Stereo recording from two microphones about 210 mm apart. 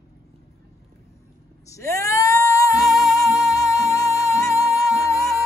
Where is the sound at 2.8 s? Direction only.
Centre (ahead or behind).